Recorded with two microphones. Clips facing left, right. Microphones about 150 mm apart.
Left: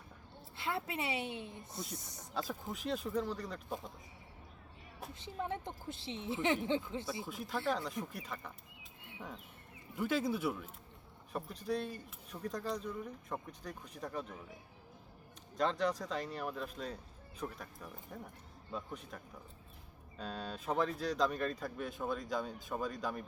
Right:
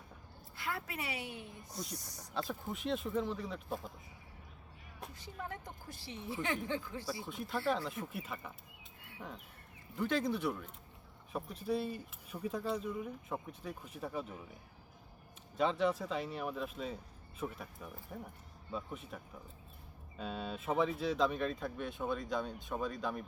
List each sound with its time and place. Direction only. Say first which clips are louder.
0.5 s speech: left 3 dB; 25° left (ahead or behind)
2.3 s speech: right 1 dB; centre (ahead or behind)
5.1 s speech: left 6 dB; 25° left (ahead or behind)
7.3 s speech: right 2 dB; centre (ahead or behind)
9.0 s cricket: left 1 dB; 20° left (ahead or behind)
10.0 s speech: even; 5° left (ahead or behind)
15.5 s speech: right 1 dB; 5° right (ahead or behind)